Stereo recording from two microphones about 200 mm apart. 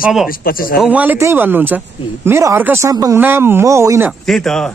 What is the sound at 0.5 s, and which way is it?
Speech, 45° left (ahead or behind).